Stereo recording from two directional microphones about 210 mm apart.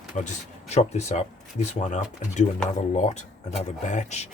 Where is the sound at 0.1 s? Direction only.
35° left (ahead or behind).